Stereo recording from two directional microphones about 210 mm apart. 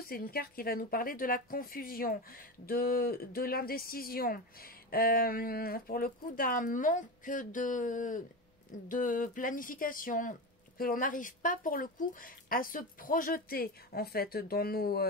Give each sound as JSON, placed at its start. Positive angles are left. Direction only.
{"t": 0.0, "sound": "speech", "side_deg": 45}